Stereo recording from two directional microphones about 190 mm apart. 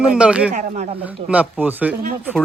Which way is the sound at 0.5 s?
35° right (ahead or behind).